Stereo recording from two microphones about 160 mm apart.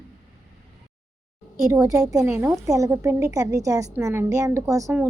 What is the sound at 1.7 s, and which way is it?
A woman's voice, 20° right (ahead or behind).